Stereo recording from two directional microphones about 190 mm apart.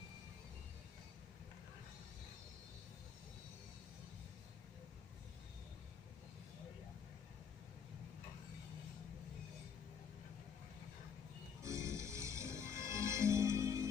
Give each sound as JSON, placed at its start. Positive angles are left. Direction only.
{"t": 11.6, "sound": "music", "side_deg": -15}